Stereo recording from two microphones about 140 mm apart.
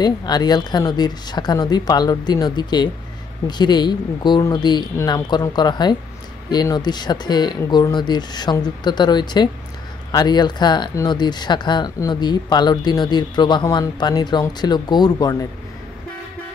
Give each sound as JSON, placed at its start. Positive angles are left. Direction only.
{"t": 0.0, "sound": "speech", "side_deg": 30}